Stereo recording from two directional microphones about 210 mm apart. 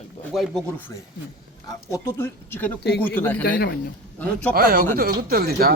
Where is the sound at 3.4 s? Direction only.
45° left (ahead or behind).